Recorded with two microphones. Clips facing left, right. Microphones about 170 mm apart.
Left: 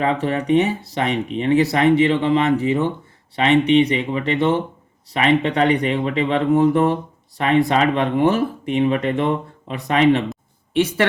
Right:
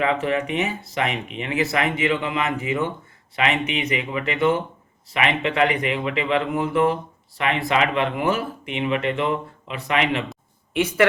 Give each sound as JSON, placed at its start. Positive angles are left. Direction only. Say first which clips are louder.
{"t": 0.0, "sound": "speech", "louder": "left 2 dB", "side_deg": 35}